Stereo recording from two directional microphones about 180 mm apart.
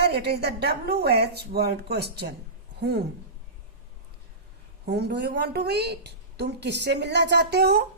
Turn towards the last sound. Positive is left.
turn(degrees=-65)  # may be behind; listen again after turning